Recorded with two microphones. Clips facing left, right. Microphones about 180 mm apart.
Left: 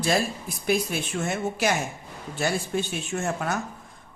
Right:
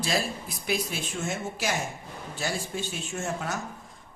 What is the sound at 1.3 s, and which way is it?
Speech, 60° left (ahead or behind).